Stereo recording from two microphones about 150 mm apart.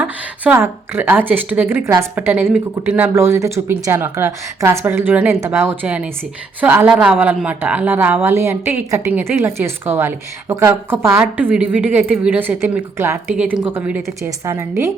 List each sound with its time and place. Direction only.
0.0 s a woman's voice: 15° right (ahead or behind)